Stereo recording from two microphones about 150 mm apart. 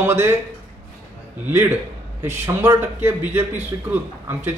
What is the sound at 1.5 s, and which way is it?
Speech, 15° right (ahead or behind).